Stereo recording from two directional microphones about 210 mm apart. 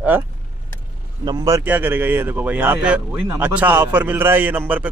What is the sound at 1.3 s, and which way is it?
A man's voice, 15° right (ahead or behind).